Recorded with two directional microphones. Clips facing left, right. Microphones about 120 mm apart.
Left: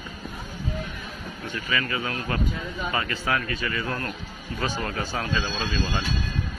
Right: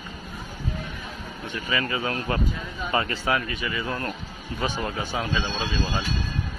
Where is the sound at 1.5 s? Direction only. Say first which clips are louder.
Right 1 dB; 25° right (ahead or behind).